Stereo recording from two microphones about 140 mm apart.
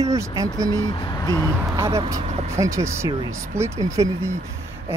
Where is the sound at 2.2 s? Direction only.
50° right (ahead or behind).